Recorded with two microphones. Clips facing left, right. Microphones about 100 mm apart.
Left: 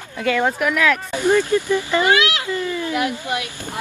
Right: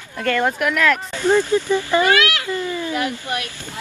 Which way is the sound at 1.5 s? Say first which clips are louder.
Even; 20° right (ahead or behind).